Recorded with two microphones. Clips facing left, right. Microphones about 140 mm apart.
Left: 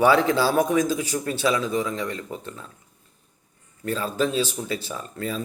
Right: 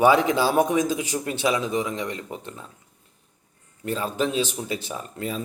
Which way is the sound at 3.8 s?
20° right (ahead or behind).